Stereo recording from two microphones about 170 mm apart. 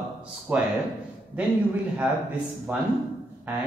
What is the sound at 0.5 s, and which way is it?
Speech, 10° right (ahead or behind).